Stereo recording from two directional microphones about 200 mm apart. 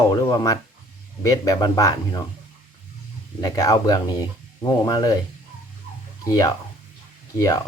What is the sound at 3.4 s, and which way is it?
Speech, 20° left (ahead or behind).